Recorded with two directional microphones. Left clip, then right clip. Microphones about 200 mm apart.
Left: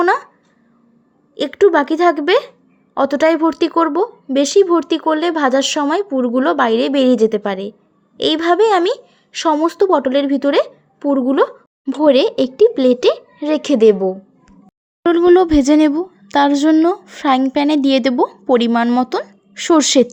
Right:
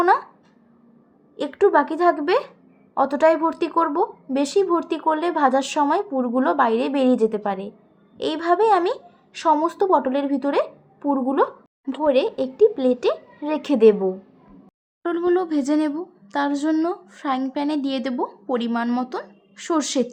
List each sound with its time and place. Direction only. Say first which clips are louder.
1.4 s a woman's voice: left 5 dB; 40° left (ahead or behind)